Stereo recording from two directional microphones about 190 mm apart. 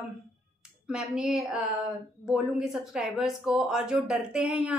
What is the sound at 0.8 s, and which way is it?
A woman's voice, 5° right (ahead or behind).